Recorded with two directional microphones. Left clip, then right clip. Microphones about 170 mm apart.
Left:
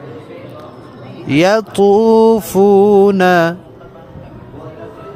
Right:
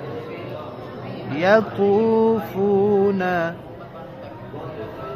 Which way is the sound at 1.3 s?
90° left.